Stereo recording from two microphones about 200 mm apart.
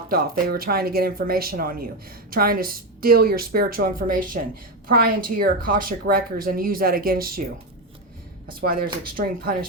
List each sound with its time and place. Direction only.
0.1 s speech: 50° right (ahead or behind)
8.6 s speech: 45° right (ahead or behind)